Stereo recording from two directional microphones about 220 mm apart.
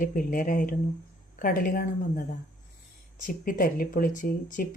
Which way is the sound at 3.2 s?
40° left (ahead or behind).